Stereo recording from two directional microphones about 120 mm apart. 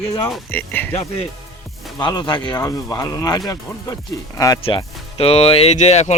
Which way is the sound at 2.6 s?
25° left (ahead or behind).